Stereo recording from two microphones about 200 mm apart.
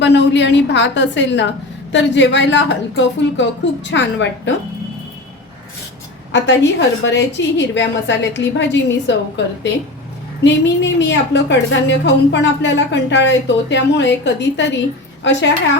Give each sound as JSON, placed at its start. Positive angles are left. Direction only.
{"t": 0.0, "sound": "a woman's voice", "side_deg": 60}
{"t": 6.3, "sound": "a woman's voice", "side_deg": 65}
{"t": 10.4, "sound": "a woman's voice", "side_deg": 60}